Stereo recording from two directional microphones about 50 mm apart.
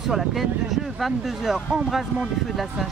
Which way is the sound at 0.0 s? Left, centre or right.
Centre.